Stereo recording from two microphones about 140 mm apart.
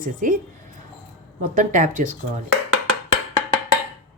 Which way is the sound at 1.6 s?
65° right (ahead or behind).